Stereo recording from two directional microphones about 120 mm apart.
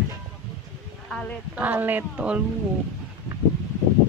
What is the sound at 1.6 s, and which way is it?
Speech, 15° right (ahead or behind).